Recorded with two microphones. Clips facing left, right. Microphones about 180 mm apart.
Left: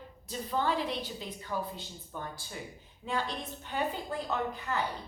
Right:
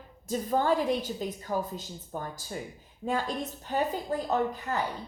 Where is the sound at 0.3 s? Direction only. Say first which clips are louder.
Right 6 dB; 45° right (ahead or behind).